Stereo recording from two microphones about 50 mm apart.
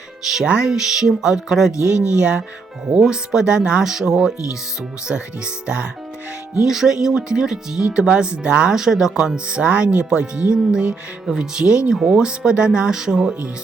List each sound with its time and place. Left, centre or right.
0.4 s speech: right
0.7 s speech: centre
1.7 s speech: left
2.1 s speech: right
5.6 s speech: right